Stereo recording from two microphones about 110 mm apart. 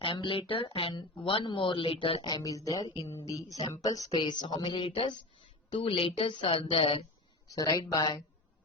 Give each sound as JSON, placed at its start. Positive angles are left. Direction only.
{"t": 0.0, "sound": "speech", "side_deg": 50}
{"t": 2.2, "sound": "speech", "side_deg": 30}
{"t": 4.2, "sound": "speech", "side_deg": 45}
{"t": 7.4, "sound": "speech", "side_deg": 30}